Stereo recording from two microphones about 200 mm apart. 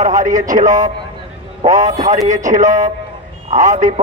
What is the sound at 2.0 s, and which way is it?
A man's voice, 40° right (ahead or behind).